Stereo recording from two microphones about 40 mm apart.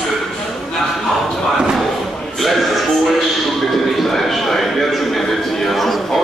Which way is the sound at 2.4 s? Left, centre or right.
Centre.